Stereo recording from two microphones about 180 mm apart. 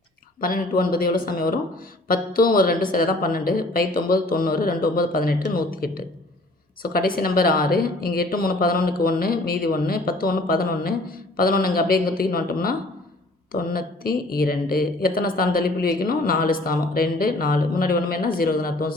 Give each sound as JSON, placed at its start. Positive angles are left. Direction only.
{"t": 0.3, "sound": "speech", "side_deg": 55}